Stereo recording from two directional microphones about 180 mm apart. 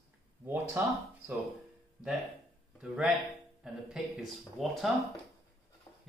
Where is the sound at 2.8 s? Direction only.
5° right (ahead or behind).